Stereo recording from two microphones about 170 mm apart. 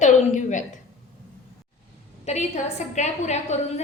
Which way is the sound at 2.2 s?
40° left (ahead or behind).